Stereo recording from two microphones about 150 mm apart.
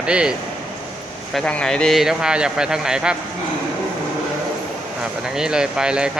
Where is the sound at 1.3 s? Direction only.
5° left (ahead or behind).